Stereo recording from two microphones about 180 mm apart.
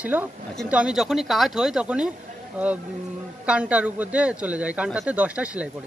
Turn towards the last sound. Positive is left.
turn(degrees=-5)  # may be behind; listen again after turning